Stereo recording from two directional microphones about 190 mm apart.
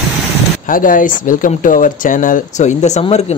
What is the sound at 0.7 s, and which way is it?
Speech, 45° left (ahead or behind).